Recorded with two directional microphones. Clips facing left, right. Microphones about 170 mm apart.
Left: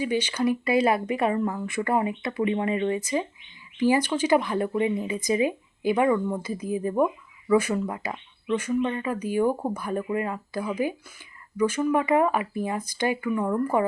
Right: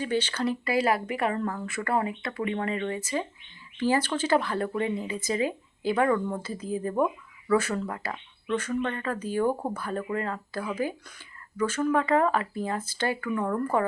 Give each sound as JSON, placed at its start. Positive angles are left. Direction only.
{"t": 0.0, "sound": "speech", "side_deg": 10}